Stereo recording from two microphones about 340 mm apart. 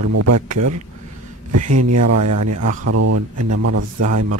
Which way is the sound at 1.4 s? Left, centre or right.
Right.